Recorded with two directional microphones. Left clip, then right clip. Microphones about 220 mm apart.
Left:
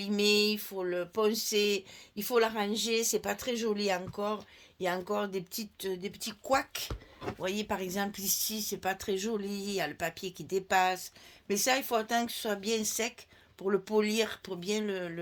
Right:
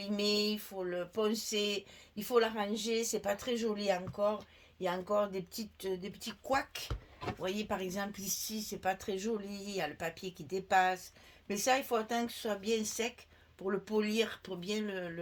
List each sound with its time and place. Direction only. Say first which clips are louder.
0.0 s speech: left 6 dB; 40° left (ahead or behind)